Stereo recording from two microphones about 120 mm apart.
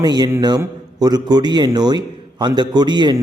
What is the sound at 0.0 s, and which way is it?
A man's voice, 35° right (ahead or behind).